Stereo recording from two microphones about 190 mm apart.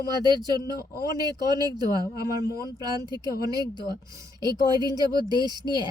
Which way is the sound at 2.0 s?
15° right (ahead or behind).